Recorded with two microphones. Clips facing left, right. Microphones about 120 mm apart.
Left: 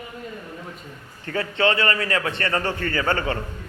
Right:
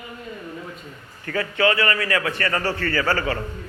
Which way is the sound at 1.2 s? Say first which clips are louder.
Right 1 dB; 25° left (ahead or behind).